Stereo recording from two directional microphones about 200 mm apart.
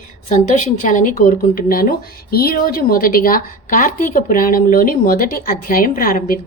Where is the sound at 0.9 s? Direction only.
40° left (ahead or behind).